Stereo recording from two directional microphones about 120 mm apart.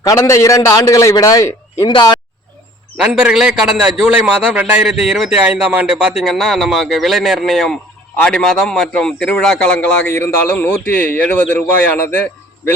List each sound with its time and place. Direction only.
0.0 s a man's voice: 25° left (ahead or behind)
3.0 s a man's voice: 5° right (ahead or behind); by 12.7 s 20° left (ahead or behind)